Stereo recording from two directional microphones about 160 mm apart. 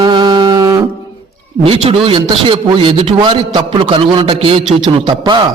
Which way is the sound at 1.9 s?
35° right (ahead or behind).